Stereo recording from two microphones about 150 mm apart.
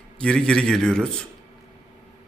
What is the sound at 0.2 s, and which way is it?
Speech, 5° left (ahead or behind).